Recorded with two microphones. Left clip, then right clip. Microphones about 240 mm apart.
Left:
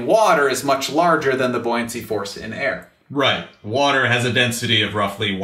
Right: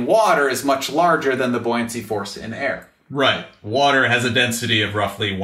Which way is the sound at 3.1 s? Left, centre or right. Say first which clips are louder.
Right 1 dB; right.